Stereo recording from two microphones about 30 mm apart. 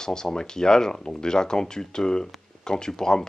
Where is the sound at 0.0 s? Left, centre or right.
Left.